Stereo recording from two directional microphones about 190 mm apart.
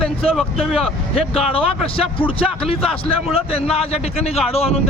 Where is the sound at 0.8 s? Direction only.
30° left (ahead or behind).